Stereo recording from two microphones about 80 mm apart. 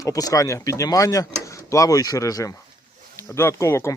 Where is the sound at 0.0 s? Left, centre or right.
Left.